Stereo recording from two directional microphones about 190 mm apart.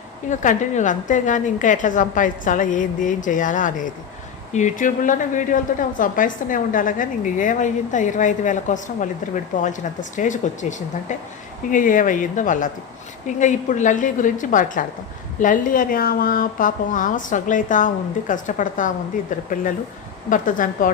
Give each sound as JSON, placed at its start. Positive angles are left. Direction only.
{"t": 0.3, "sound": "a woman's voice", "side_deg": 40}